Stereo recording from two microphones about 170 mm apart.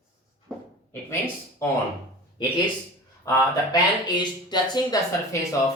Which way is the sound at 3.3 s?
25° left (ahead or behind).